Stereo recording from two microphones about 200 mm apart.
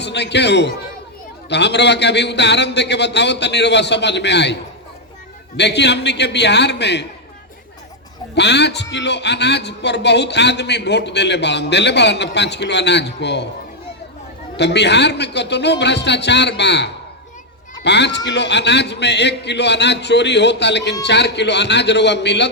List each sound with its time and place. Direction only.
0.0 s a man's voice: 60° left (ahead or behind)
5.5 s a man's voice: 60° left (ahead or behind)
8.4 s a man's voice: 60° left (ahead or behind)
14.5 s a man's voice: 60° left (ahead or behind)